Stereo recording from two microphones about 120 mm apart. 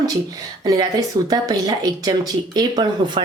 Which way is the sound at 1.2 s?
30° right (ahead or behind).